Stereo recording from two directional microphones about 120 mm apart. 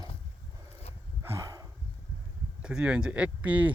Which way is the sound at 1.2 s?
25° right (ahead or behind).